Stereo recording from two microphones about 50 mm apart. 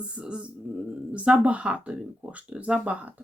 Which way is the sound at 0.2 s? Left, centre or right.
Right.